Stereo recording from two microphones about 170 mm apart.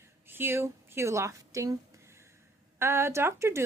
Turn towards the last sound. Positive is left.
turn(degrees=-15)  # may be behind; listen again after turning